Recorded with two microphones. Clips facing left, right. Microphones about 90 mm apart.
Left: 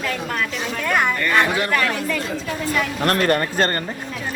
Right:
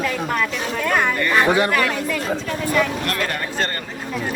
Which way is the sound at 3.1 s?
50° left (ahead or behind).